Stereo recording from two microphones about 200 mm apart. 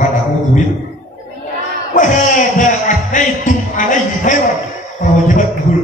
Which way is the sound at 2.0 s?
40° left (ahead or behind).